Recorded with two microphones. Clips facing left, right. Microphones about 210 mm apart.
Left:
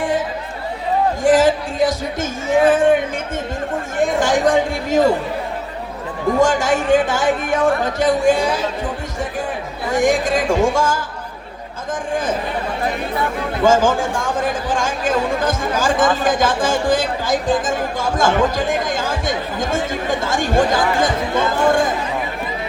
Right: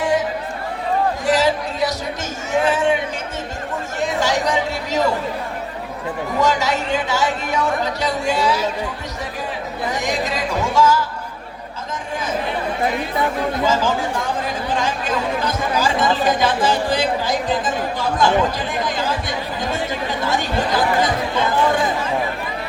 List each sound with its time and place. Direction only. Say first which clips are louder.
1.2 s a sound: left 8 dB; 50° left (ahead or behind)
3.9 s chatter: left 4 dB; 50° left (ahead or behind)
6.4 s speech: left 2 dB; 50° left (ahead or behind)
9.9 s speech: left 9 dB; 50° left (ahead or behind)
13.7 s speech: left 8 dB; 50° left (ahead or behind)